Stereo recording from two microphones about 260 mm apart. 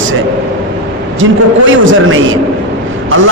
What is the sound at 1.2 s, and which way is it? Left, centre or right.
Speech, right.